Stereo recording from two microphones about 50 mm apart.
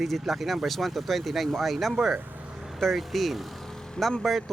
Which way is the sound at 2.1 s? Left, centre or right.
Right.